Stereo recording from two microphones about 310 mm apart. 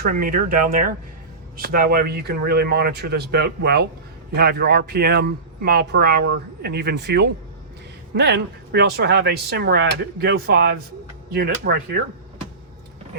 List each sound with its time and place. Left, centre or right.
0.0 s speech: right